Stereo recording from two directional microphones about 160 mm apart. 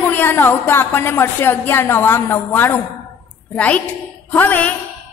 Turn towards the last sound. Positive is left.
turn(degrees=10)  # may be behind; listen again after turning